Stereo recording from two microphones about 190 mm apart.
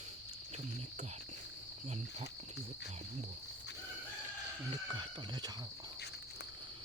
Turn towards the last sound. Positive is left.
turn(degrees=-20)  # may be behind; listen again after turning